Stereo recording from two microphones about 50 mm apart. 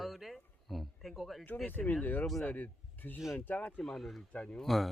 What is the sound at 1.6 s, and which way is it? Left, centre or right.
Speech, left.